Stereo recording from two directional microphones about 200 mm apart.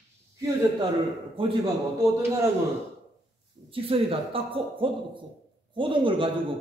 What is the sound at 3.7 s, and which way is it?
A man's voice, 30° right (ahead or behind).